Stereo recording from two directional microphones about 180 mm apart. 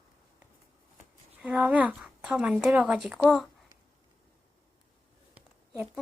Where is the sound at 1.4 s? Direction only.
10° right (ahead or behind).